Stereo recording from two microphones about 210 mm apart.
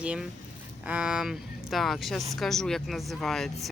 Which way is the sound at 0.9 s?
5° right (ahead or behind).